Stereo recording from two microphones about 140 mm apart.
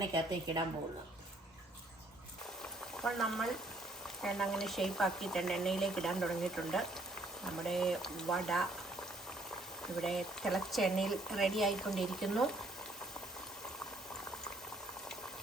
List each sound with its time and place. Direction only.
0.0 s a woman's voice: 30° right (ahead or behind)
3.0 s speech: centre (ahead or behind)
10.0 s speech: centre (ahead or behind)